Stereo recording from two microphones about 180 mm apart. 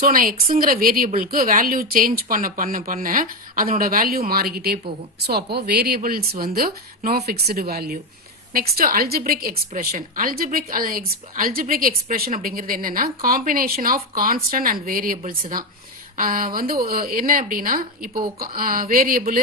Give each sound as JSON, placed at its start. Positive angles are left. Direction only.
{"t": 0.0, "sound": "a woman's voice", "side_deg": -50}